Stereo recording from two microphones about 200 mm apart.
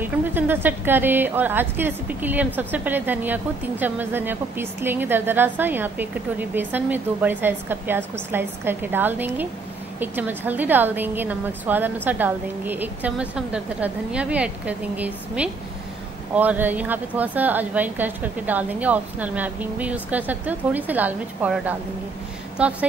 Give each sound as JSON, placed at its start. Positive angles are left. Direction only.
{"t": 0.0, "sound": "speech", "side_deg": -10}